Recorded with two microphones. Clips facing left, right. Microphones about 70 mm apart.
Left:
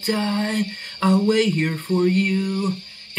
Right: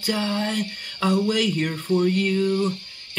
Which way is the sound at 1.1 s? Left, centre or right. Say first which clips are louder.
Left 4 dB; left.